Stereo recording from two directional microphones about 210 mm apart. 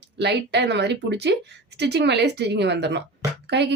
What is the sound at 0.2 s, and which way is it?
A woman's voice, 55° right (ahead or behind).